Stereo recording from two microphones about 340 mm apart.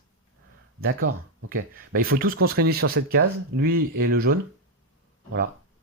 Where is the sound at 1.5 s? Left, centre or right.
Right.